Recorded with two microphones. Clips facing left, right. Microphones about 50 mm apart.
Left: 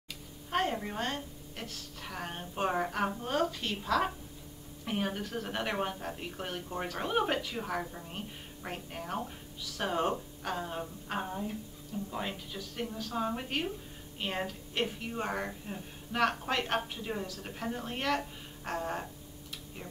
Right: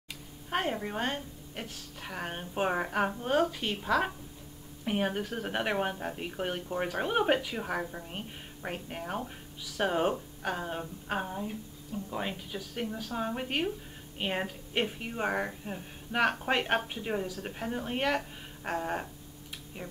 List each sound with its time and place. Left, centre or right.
0.5 s a woman's voice: centre
17.2 s a woman's voice: centre